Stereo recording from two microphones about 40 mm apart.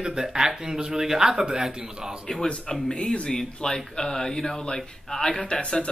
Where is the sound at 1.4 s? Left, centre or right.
Right.